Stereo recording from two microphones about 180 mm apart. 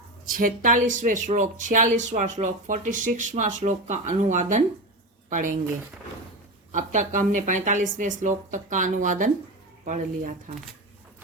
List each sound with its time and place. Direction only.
0.3 s speech: 50° right (ahead or behind)
6.7 s speech: 40° right (ahead or behind)